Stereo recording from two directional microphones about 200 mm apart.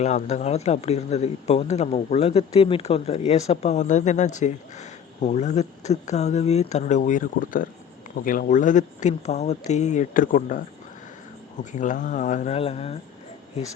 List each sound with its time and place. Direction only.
0.0 s speech: 35° left (ahead or behind)
11.6 s speech: 40° left (ahead or behind)